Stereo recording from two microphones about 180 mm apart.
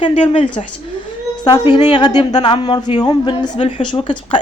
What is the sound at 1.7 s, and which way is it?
A woman's voice, 25° left (ahead or behind).